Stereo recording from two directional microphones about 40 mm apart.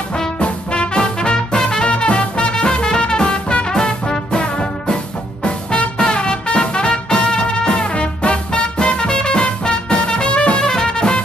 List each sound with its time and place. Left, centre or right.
0.4 s music: left